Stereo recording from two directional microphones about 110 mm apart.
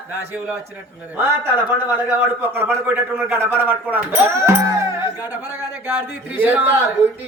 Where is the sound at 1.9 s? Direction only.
15° right (ahead or behind).